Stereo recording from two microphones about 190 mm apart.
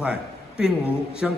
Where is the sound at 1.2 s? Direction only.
5° right (ahead or behind).